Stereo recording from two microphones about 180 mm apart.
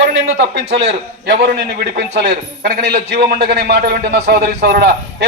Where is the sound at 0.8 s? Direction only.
65° right (ahead or behind).